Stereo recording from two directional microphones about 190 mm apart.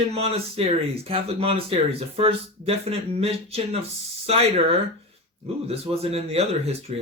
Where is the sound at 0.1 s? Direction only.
30° right (ahead or behind).